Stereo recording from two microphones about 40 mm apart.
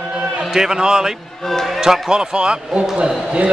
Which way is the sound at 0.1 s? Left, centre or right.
Centre.